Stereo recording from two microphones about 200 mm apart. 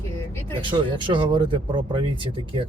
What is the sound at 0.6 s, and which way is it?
Speech, 25° right (ahead or behind).